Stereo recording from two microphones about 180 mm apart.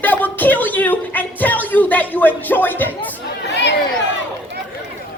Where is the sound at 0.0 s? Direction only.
10° left (ahead or behind).